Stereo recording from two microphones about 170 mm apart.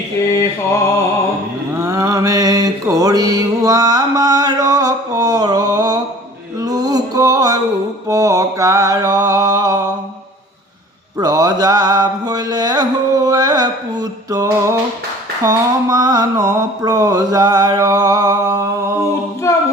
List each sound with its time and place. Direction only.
1.8 s mantra: 20° right (ahead or behind)
6.6 s music: 20° right (ahead or behind)
8.0 s mantra: 20° right (ahead or behind)
11.2 s mantra: 20° right (ahead or behind)
15.4 s a sound: 25° right (ahead or behind)
19.4 s a capella: 15° left (ahead or behind)